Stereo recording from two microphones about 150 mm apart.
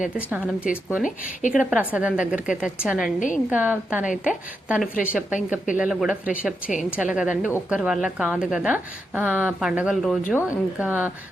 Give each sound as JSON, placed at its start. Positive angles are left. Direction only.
{"t": 0.2, "sound": "a woman's voice", "side_deg": -10}
{"t": 1.0, "sound": "speech", "side_deg": 60}
{"t": 1.5, "sound": "a woman's voice", "side_deg": -10}
{"t": 3.2, "sound": "speech", "side_deg": 60}
{"t": 3.5, "sound": "a woman's voice", "side_deg": -10}
{"t": 10.3, "sound": "a woman's voice", "side_deg": -10}